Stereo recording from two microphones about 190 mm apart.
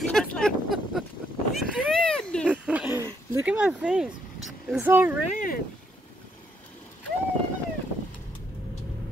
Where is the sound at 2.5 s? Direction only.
5° right (ahead or behind).